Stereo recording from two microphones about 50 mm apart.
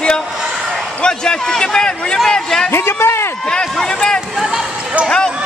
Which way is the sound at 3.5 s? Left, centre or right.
Centre.